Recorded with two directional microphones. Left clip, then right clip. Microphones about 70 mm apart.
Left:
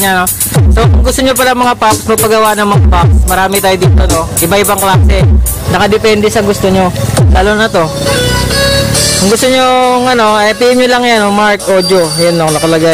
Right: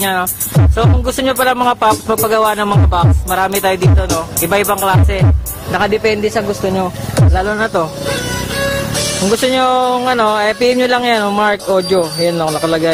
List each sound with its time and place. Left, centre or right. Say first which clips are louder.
0.0 s speech: left 6 dB; centre
5.7 s speech: left 5 dB; centre
7.4 s speech: left 9 dB; centre
9.4 s speech: left 4 dB; centre